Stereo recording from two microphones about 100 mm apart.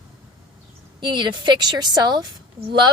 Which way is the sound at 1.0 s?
50° right (ahead or behind).